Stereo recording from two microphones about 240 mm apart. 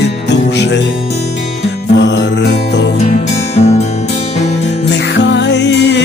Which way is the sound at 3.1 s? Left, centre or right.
Left.